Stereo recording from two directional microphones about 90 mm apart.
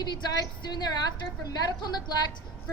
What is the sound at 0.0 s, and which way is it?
A woman's voice, 45° left (ahead or behind).